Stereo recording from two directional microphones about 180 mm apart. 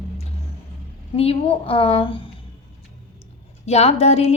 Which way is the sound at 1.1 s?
35° left (ahead or behind).